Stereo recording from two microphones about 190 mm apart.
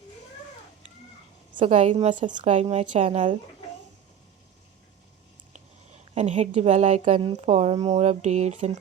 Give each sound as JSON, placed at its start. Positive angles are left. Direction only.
{"t": 1.6, "sound": "a woman's voice", "side_deg": -40}
{"t": 6.1, "sound": "a woman's voice", "side_deg": -35}